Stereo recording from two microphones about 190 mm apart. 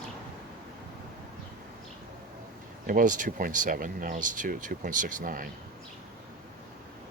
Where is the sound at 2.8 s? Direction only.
45° right (ahead or behind).